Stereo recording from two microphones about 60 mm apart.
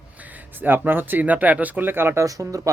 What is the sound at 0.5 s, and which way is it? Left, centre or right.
Speech, right.